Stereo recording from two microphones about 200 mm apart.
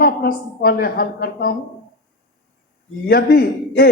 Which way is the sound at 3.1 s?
50° left (ahead or behind).